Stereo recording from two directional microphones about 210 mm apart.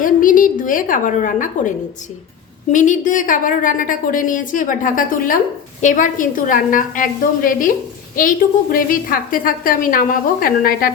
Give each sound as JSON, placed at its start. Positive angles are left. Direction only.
{"t": 0.0, "sound": "a woman's voice", "side_deg": 40}
{"t": 2.7, "sound": "a woman's voice", "side_deg": 35}